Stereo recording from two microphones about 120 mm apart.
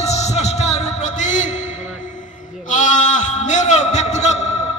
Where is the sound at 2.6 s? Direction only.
90° left; by 4.5 s 70° left (ahead or behind).